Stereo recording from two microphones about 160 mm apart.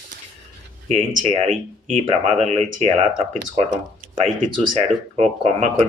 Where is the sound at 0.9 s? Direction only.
45° right (ahead or behind).